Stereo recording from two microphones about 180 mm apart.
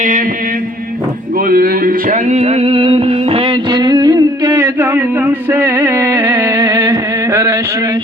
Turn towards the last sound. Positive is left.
turn(degrees=-15)  # may be behind; listen again after turning